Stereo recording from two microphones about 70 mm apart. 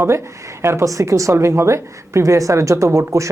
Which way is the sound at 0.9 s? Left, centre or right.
Right.